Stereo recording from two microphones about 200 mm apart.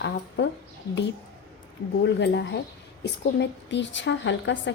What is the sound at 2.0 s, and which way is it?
A woman's voice, 60° left (ahead or behind).